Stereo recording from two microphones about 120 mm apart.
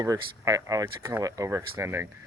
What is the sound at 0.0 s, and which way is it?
Speech, 30° right (ahead or behind).